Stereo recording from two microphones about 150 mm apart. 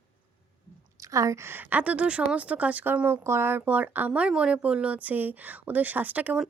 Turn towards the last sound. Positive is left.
turn(degrees=-10)  # may be behind; listen again after turning